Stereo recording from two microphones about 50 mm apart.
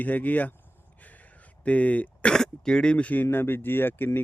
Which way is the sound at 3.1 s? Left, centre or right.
Left.